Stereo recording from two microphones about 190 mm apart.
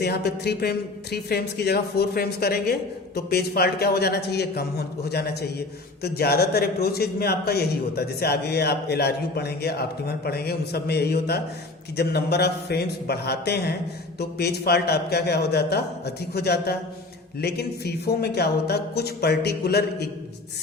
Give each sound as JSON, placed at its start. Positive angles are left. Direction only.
{"t": 0.0, "sound": "speech", "side_deg": 60}